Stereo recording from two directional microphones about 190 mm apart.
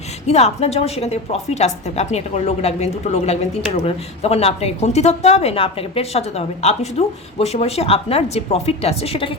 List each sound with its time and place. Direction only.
0.3 s a woman's voice: 35° left (ahead or behind)